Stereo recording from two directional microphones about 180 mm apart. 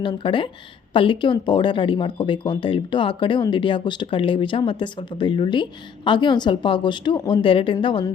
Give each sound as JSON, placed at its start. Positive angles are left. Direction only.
{"t": 0.0, "sound": "speech", "side_deg": 25}